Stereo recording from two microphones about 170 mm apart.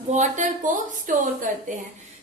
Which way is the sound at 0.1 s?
45° right (ahead or behind).